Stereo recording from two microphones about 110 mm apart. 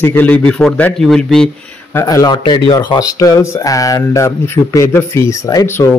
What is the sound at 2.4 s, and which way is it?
Speech, 45° left (ahead or behind).